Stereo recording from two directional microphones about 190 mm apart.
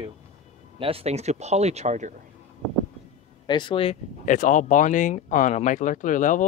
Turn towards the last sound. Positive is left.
turn(degrees=45)  # may be behind; listen again after turning